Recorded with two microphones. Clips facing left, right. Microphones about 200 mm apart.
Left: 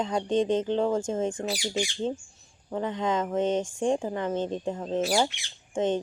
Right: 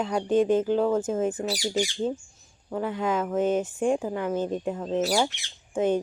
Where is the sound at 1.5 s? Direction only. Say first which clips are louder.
Right 3 dB; 40° right (ahead or behind).